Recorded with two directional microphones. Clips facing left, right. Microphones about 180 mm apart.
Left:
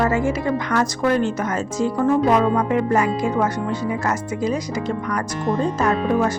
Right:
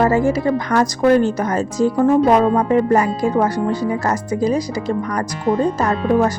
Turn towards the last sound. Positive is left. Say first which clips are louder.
# right 3 dB
turn(degrees=-40)  # may be behind; listen again after turning